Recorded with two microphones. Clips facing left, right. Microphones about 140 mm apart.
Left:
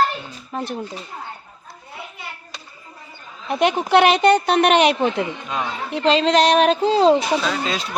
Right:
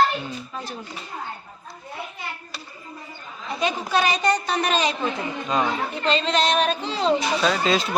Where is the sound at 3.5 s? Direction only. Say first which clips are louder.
Left 7 dB; 65° left (ahead or behind).